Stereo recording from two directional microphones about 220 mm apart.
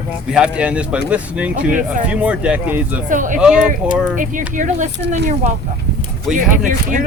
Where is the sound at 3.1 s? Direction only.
35° right (ahead or behind).